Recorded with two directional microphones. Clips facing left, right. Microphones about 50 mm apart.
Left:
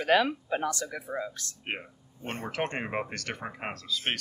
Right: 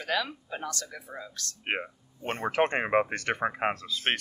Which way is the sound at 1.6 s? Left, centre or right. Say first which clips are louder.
Right 5 dB; right.